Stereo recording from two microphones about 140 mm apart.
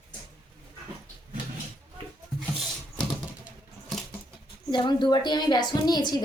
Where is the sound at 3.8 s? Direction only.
Centre (ahead or behind).